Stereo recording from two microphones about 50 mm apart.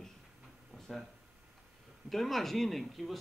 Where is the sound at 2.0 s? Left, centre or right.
Centre.